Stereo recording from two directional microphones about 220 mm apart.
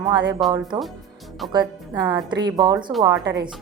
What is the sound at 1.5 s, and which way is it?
Speech, 20° right (ahead or behind).